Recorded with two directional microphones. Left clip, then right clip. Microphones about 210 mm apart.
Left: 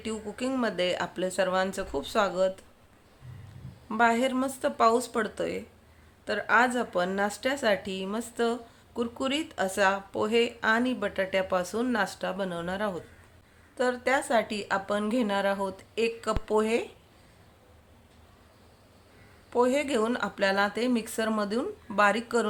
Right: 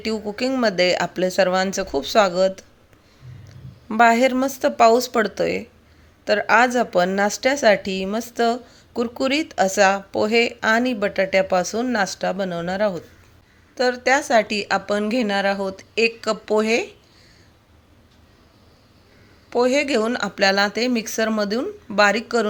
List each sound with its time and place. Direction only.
0.0 s speech: 25° right (ahead or behind)
3.8 s a woman's voice: 30° right (ahead or behind)
19.5 s speech: 20° right (ahead or behind)